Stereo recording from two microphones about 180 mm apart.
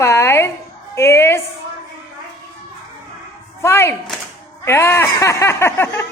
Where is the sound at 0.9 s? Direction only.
15° left (ahead or behind).